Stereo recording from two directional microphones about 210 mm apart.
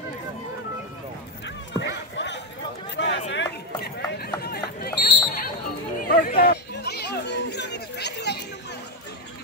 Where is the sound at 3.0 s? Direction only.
55° left (ahead or behind).